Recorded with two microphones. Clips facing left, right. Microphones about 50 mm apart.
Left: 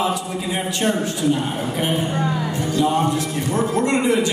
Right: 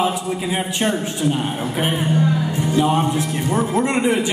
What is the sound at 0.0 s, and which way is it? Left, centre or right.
A man's voice, right.